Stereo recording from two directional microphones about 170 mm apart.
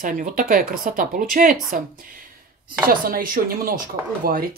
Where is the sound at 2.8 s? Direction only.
55° right (ahead or behind).